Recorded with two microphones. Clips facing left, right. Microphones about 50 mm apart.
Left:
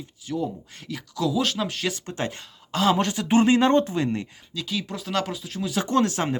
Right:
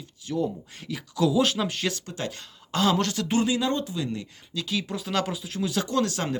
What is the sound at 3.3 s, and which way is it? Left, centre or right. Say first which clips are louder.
Speech: left 8 dB; left.